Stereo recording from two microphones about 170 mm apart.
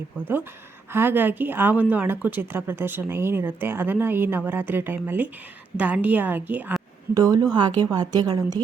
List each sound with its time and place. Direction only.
0.9 s speech: 10° right (ahead or behind)
7.1 s a woman's voice: 20° right (ahead or behind)